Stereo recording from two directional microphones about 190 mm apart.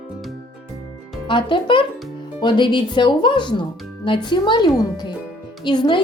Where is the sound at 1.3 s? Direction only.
25° left (ahead or behind).